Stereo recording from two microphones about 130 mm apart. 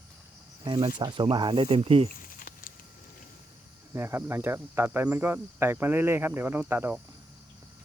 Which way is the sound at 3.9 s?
20° right (ahead or behind).